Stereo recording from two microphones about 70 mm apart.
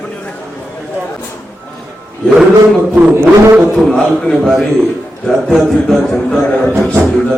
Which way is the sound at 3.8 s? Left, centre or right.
Centre.